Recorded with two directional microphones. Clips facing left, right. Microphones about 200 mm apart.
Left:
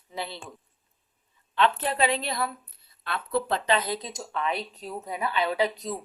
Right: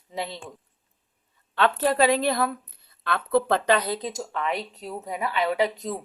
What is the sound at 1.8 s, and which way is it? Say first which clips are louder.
A woman's voice: right 6 dB; 40° right (ahead or behind).